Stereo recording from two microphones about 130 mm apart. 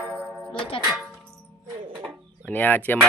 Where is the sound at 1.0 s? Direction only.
5° right (ahead or behind).